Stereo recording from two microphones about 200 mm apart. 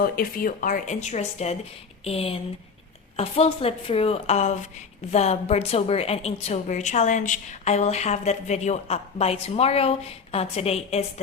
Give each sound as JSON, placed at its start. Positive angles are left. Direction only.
{"t": 0.0, "sound": "a woman's voice", "side_deg": 45}